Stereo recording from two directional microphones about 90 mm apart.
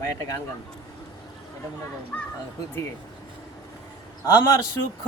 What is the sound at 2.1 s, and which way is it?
Speech, 15° left (ahead or behind).